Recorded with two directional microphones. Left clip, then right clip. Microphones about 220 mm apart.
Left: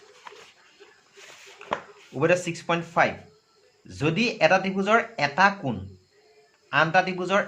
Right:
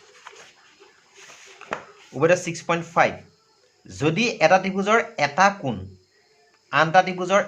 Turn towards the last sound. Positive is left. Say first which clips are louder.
# right 4 dB
turn(degrees=-15)  # may be behind; listen again after turning